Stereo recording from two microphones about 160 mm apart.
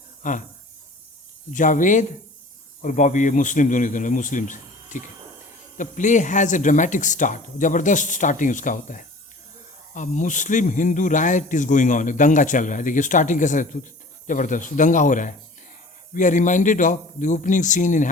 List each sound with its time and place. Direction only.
0.2 s speech: 55° left (ahead or behind)
1.5 s speech: 55° left (ahead or behind)